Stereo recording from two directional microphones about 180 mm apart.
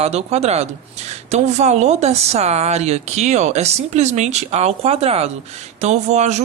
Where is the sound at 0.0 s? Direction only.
35° right (ahead or behind).